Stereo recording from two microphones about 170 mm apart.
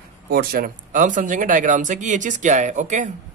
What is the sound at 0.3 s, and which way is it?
Speech, 60° right (ahead or behind).